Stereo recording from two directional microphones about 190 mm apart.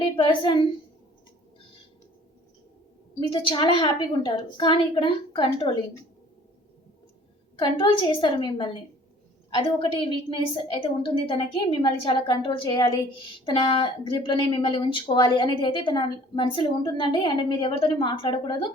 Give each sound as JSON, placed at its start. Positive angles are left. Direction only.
{"t": 0.0, "sound": "a woman's voice", "side_deg": 25}
{"t": 3.2, "sound": "a woman's voice", "side_deg": 25}
{"t": 7.6, "sound": "a woman's voice", "side_deg": 25}